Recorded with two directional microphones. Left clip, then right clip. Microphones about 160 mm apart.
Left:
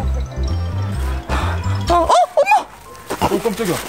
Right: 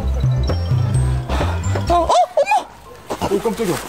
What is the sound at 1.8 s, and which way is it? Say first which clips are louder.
Music: left 1 dB; 10° left (ahead or behind).